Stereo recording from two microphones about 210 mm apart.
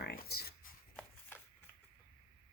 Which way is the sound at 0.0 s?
50° left (ahead or behind).